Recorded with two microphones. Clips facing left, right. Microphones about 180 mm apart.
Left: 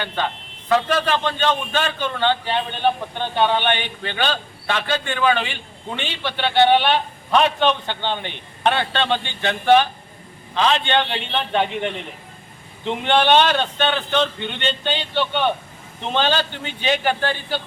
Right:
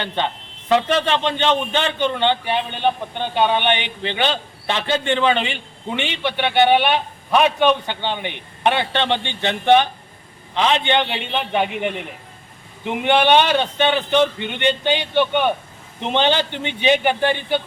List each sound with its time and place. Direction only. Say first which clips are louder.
0.7 s a man's voice: right 1 dB; 25° right (ahead or behind)